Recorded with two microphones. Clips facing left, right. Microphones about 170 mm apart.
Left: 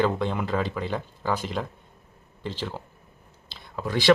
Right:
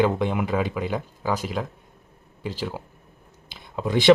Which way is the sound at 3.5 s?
20° right (ahead or behind).